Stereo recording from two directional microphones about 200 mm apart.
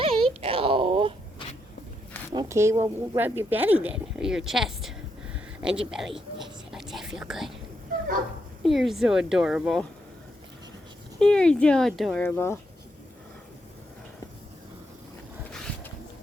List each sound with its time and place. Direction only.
0.0 s a sound: 30° right (ahead or behind)
2.3 s speech: 20° right (ahead or behind); by 4.9 s centre (ahead or behind)
5.5 s a sound: 5° right (ahead or behind)
6.1 s whispering: centre (ahead or behind)
8.6 s speech: centre (ahead or behind)
11.2 s speech: 5° left (ahead or behind)
12.2 s speech: 10° left (ahead or behind)